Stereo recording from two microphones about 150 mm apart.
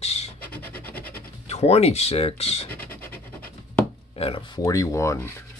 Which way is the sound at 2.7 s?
15° left (ahead or behind).